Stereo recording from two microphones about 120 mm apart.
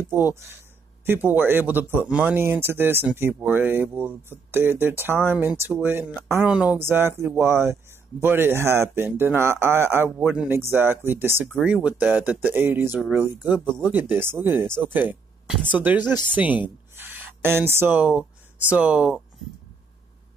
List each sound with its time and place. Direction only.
0.1 s speech: 20° right (ahead or behind)
6.4 s speech: 10° right (ahead or behind)
6.8 s speech: 20° right (ahead or behind)
16.0 s speech: 35° left (ahead or behind)
16.3 s a sound: 15° right (ahead or behind)
17.7 s speech: 15° right (ahead or behind)